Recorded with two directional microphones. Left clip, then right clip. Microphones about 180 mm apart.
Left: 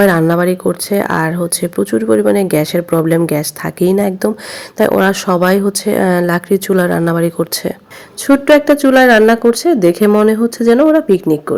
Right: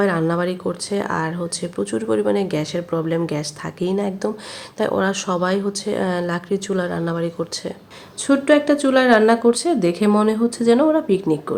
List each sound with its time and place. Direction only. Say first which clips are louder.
0.0 s speech: left 9 dB; 45° left (ahead or behind)